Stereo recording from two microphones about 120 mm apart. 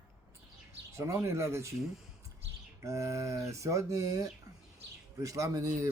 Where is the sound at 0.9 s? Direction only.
25° right (ahead or behind).